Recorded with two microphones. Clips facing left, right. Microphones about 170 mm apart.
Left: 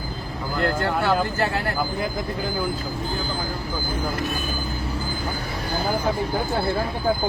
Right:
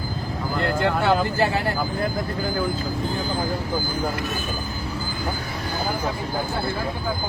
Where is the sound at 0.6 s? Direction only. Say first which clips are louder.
Right 1 dB; centre (ahead or behind).